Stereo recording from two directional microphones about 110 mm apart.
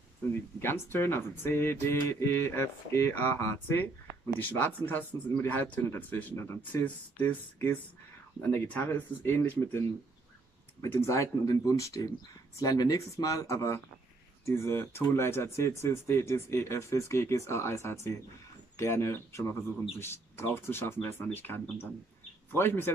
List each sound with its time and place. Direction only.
0.3 s speech: 20° left (ahead or behind)